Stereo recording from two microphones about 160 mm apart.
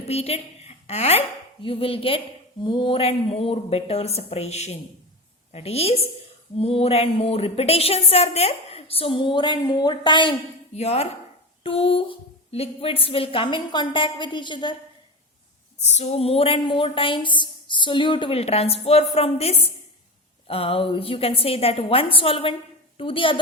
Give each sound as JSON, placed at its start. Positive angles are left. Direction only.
{"t": 0.1, "sound": "a woman's voice", "side_deg": 40}
{"t": 10.8, "sound": "speech", "side_deg": 40}
{"t": 15.8, "sound": "speech", "side_deg": 45}